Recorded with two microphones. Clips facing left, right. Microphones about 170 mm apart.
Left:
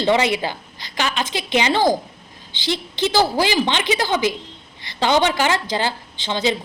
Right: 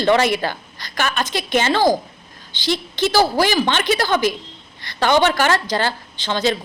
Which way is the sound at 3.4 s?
15° left (ahead or behind).